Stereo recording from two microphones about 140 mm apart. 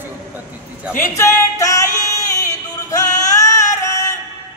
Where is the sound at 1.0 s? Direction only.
20° left (ahead or behind).